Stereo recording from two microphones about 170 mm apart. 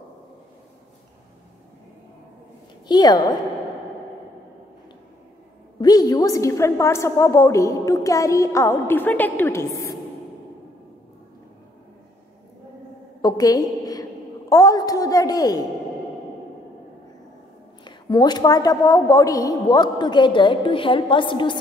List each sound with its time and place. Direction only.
2.9 s a woman's voice: 25° left (ahead or behind)
5.8 s a woman's voice: 25° left (ahead or behind)
13.2 s a sound: 20° left (ahead or behind)
14.5 s a woman's voice: 20° left (ahead or behind)
17.8 s a woman's voice: 25° left (ahead or behind)